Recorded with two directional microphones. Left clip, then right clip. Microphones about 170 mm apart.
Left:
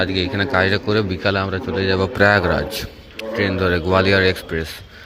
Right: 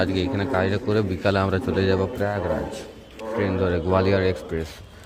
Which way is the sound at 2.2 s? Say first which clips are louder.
Left 10 dB; 20° left (ahead or behind).